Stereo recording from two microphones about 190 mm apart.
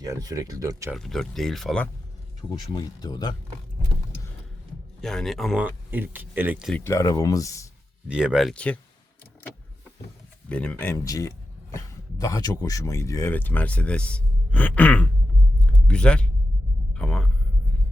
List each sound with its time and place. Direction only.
0.0 s speech: 20° right (ahead or behind)
0.9 s speech: centre (ahead or behind)
2.6 s speech: 20° left (ahead or behind)
4.9 s speech: centre (ahead or behind)
6.7 s speech: 15° left (ahead or behind)
8.0 s speech: 5° right (ahead or behind)
10.5 s speech: 5° left (ahead or behind)
15.5 s a sound: 5° left (ahead or behind)
16.9 s speech: 5° left (ahead or behind)